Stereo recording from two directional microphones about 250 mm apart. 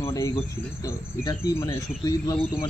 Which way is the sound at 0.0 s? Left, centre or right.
Centre.